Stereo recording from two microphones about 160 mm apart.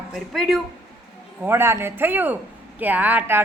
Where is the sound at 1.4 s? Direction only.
15° right (ahead or behind).